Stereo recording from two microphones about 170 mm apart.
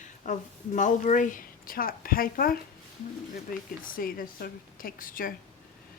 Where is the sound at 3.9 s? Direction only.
55° left (ahead or behind).